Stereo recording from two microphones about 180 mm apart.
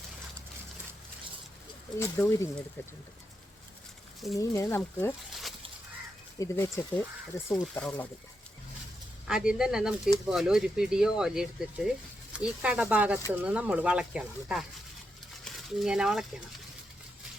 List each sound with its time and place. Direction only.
2.0 s speech: 15° left (ahead or behind)
4.4 s speech: 15° left (ahead or behind)
5.3 s dog: centre (ahead or behind)
6.4 s speech: 15° left (ahead or behind)
9.2 s speech: 5° right (ahead or behind)